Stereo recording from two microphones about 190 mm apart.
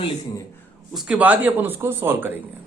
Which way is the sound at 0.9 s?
5° right (ahead or behind).